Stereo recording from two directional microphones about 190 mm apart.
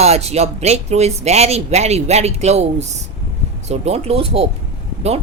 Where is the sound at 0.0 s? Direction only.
35° right (ahead or behind).